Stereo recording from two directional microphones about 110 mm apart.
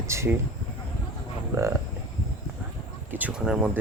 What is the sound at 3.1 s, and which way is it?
Speech, 15° right (ahead or behind).